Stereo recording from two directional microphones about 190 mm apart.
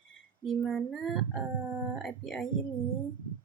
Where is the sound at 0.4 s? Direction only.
Centre (ahead or behind).